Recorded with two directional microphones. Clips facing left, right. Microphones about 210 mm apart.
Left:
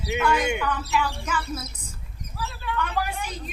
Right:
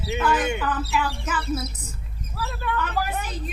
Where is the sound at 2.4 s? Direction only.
55° right (ahead or behind).